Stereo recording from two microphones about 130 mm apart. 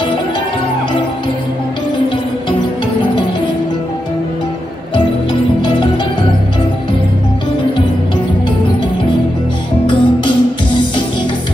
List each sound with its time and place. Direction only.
9.8 s music: 40° left (ahead or behind)